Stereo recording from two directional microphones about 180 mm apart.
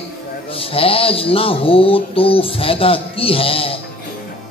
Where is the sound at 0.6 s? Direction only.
30° left (ahead or behind).